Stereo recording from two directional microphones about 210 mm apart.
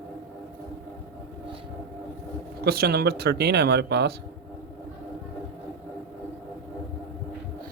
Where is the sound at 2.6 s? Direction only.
50° right (ahead or behind).